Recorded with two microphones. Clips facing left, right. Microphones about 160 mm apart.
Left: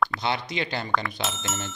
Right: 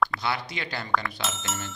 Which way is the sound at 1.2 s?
Centre (ahead or behind).